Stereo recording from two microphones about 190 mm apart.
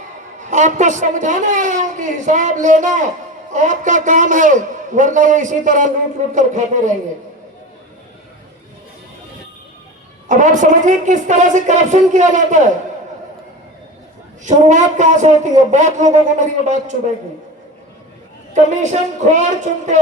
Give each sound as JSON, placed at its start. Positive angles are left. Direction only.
{"t": 0.5, "sound": "a woman's voice", "side_deg": -40}
{"t": 10.2, "sound": "a woman's voice", "side_deg": -40}
{"t": 14.4, "sound": "a woman's voice", "side_deg": -40}
{"t": 18.5, "sound": "a woman's voice", "side_deg": -40}